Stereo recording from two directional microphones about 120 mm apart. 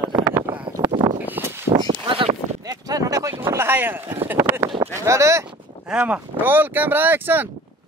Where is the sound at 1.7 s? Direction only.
35° right (ahead or behind).